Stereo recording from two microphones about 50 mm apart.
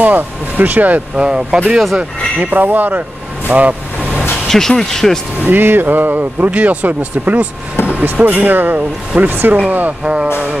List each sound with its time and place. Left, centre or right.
0.0 s speech: right
1.1 s speech: centre
2.0 s speech: right
4.1 s vehicle: left
4.5 s speech: centre
5.4 s speech: right
10.0 s speech: right